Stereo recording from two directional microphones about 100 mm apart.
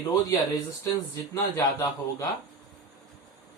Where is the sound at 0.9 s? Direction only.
35° left (ahead or behind).